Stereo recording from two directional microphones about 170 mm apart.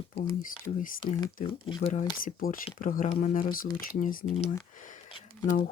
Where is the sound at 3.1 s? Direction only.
40° left (ahead or behind).